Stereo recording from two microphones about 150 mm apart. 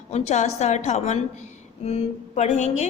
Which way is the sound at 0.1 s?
50° left (ahead or behind).